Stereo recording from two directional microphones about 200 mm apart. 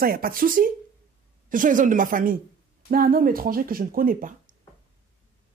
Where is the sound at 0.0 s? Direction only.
45° right (ahead or behind).